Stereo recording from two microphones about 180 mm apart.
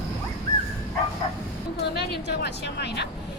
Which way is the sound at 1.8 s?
65° left (ahead or behind).